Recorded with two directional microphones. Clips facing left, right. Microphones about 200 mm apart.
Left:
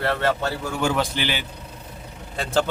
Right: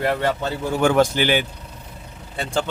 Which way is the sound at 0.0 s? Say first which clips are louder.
Right 1 dB; 15° right (ahead or behind).